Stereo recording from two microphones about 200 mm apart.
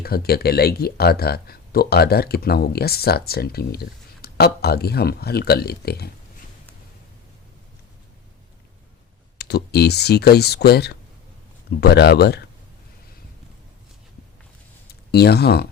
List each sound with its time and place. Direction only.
0.0 s speech: 50° left (ahead or behind)
9.4 s speech: 55° left (ahead or behind)
14.8 s speech: 55° left (ahead or behind)